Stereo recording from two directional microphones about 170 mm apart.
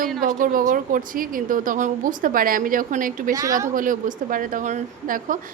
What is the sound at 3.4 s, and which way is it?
Speech, 20° right (ahead or behind).